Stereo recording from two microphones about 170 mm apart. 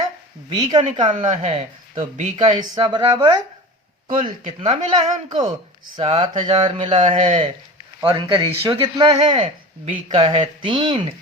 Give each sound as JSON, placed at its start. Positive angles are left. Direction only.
{"t": 0.5, "sound": "speech", "side_deg": -25}
{"t": 1.1, "sound": "a man's voice", "side_deg": -45}
{"t": 4.9, "sound": "speech", "side_deg": -25}
{"t": 6.0, "sound": "a man's voice", "side_deg": -35}